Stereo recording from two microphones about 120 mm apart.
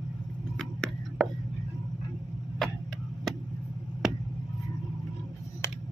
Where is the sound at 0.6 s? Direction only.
5° left (ahead or behind).